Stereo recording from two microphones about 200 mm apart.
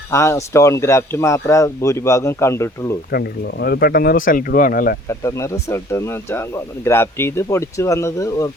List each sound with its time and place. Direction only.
0.1 s speech: 15° left (ahead or behind)
3.1 s speech: 55° left (ahead or behind)
5.0 s speech: 15° left (ahead or behind)